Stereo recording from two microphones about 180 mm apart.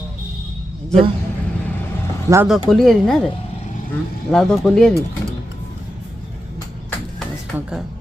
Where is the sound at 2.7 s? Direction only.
Centre (ahead or behind).